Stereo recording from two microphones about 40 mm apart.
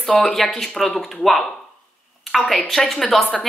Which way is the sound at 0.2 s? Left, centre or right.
Centre.